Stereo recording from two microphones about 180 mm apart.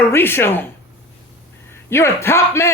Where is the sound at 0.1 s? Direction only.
15° left (ahead or behind).